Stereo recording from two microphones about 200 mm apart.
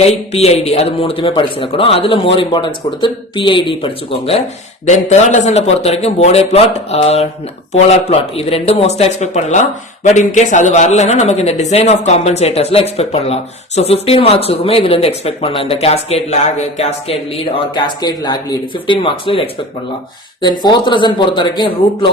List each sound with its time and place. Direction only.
0.0 s a man's voice: 30° left (ahead or behind)